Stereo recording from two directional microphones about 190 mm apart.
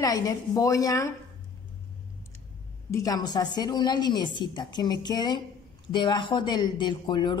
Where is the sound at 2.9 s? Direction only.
20° left (ahead or behind).